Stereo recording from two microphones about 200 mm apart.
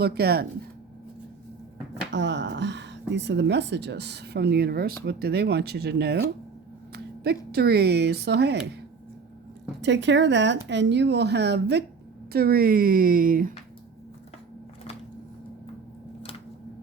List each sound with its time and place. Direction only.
0.0 s speech: 50° right (ahead or behind)
2.1 s speech: 60° right (ahead or behind)
9.8 s speech: 60° right (ahead or behind); by 13.5 s 45° right (ahead or behind)